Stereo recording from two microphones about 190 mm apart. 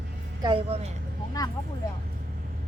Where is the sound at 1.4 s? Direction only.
20° left (ahead or behind).